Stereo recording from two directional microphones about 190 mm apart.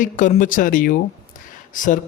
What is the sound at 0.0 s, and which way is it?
Speech, 45° left (ahead or behind).